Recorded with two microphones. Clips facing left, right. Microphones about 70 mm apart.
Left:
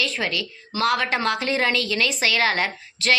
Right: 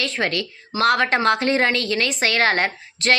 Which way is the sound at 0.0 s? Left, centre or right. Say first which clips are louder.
Right 2 dB; right.